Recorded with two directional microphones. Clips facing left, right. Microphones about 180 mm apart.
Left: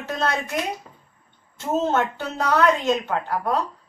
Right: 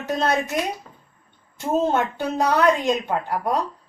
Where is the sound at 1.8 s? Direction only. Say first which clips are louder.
Even; 15° right (ahead or behind).